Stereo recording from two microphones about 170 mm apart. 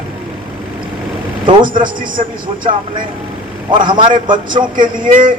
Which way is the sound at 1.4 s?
25° right (ahead or behind).